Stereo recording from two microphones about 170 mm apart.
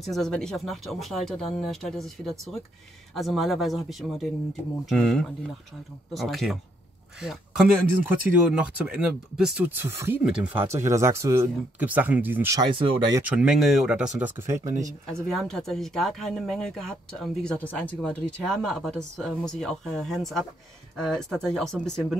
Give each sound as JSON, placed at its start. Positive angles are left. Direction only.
{"t": 0.0, "sound": "speech", "side_deg": 0}
{"t": 12.5, "sound": "speech", "side_deg": -30}
{"t": 13.4, "sound": "speech", "side_deg": -5}
{"t": 15.2, "sound": "speech", "side_deg": 5}